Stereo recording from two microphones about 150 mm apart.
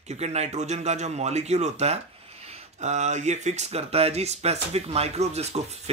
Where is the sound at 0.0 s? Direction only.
45° right (ahead or behind).